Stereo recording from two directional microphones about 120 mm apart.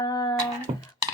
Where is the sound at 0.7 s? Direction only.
55° right (ahead or behind).